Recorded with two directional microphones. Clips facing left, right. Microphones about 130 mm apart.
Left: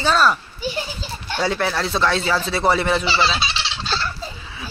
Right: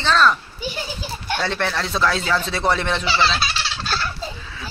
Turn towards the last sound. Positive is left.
turn(degrees=-5)  # may be behind; listen again after turning